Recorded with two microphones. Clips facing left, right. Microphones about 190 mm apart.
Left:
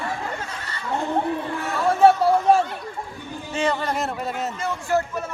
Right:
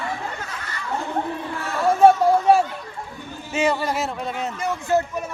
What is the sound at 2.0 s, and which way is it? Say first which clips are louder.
Chatter: right 1 dB; 10° right (ahead or behind).